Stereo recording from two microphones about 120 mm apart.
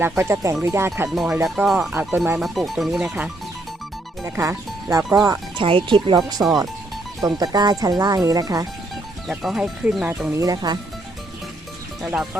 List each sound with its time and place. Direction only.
0.0 s speech: 20° right (ahead or behind)
1.1 s speech: 5° right (ahead or behind)
2.1 s speech: 20° right (ahead or behind)
2.4 s speech: centre (ahead or behind)
4.2 s speech: 25° right (ahead or behind)
5.6 s speech: 45° right (ahead or behind); by 8.6 s 30° right (ahead or behind)
9.2 s speech: centre (ahead or behind)
10.3 s speech: 30° right (ahead or behind)
12.0 s speech: 5° right (ahead or behind)